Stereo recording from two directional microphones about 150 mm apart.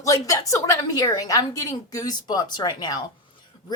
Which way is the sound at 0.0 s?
20° left (ahead or behind).